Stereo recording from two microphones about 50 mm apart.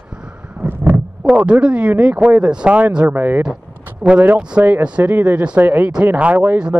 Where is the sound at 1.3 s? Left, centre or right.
Right.